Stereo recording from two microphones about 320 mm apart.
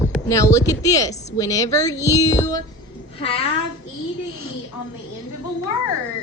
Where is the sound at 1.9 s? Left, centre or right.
Centre.